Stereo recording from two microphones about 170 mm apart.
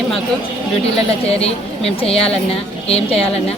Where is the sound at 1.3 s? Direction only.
35° left (ahead or behind).